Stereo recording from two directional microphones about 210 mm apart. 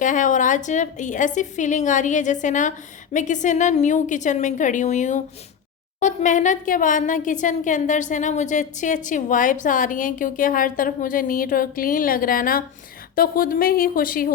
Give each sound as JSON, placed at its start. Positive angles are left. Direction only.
{"t": 0.0, "sound": "speech", "side_deg": 35}